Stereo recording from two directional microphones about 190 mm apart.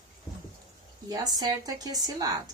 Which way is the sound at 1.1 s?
20° right (ahead or behind).